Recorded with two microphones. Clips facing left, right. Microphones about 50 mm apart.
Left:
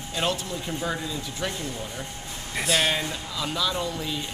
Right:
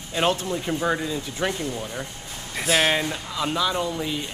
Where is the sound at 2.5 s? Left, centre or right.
Centre.